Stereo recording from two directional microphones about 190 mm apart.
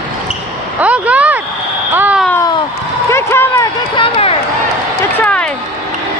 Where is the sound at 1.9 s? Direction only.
10° right (ahead or behind).